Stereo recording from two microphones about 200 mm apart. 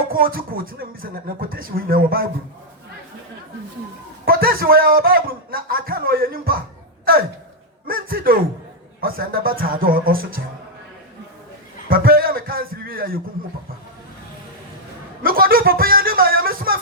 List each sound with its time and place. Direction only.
0.0 s speech: 45° right (ahead or behind)
4.3 s speech: 50° right (ahead or behind)
7.1 s gasp: 45° right (ahead or behind)
7.9 s a sound: 45° right (ahead or behind)
9.0 s speech: 45° right (ahead or behind)
11.9 s a man's voice: 45° right (ahead or behind)
15.2 s speech: 45° right (ahead or behind)